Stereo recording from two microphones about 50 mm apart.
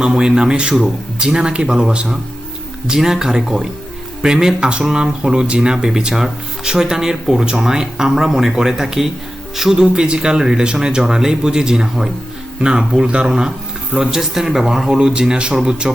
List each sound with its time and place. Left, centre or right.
0.0 s speech: centre